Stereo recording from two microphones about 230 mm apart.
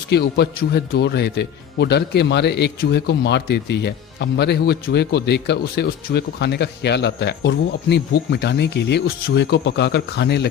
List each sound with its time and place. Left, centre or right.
0.1 s a man's voice: left